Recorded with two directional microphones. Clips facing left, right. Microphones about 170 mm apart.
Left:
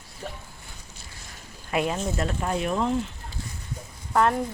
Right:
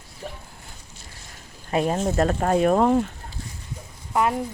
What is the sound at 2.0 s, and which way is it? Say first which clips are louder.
Speech: right 6 dB; 50° right (ahead or behind).